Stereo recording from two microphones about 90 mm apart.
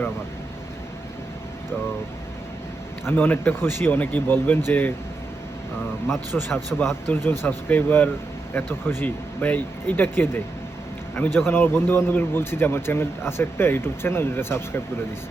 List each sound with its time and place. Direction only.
3.1 s speech: 20° left (ahead or behind)
6.3 s a man's voice: 15° left (ahead or behind)